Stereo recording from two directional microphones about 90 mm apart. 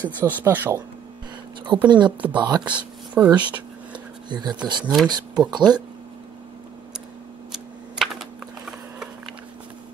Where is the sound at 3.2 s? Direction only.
25° right (ahead or behind).